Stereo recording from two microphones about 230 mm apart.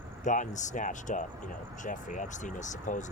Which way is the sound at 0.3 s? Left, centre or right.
Left.